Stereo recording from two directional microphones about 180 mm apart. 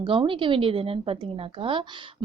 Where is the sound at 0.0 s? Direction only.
30° right (ahead or behind).